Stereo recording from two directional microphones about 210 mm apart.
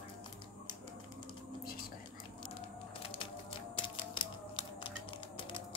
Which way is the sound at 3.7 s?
25° left (ahead or behind).